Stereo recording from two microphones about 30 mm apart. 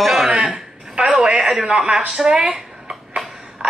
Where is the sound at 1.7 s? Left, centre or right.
Right.